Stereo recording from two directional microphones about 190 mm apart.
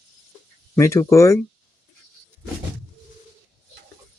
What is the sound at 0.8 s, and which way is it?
Speech, 15° left (ahead or behind).